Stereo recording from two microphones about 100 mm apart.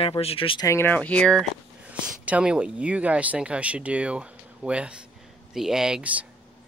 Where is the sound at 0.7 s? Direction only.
20° left (ahead or behind).